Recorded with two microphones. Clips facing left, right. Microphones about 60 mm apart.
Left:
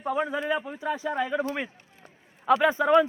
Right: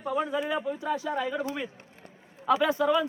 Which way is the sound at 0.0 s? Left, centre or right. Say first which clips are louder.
Left 1 dB; left.